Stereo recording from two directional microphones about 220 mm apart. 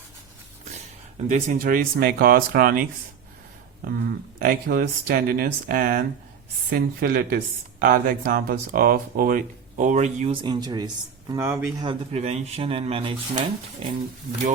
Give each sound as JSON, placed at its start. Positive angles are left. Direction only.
{"t": 1.3, "sound": "speech", "side_deg": -35}
{"t": 4.4, "sound": "speech", "side_deg": -40}
{"t": 10.4, "sound": "speech", "side_deg": -20}